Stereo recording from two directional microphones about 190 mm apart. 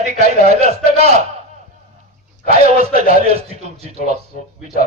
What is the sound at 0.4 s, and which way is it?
Speech, 35° right (ahead or behind).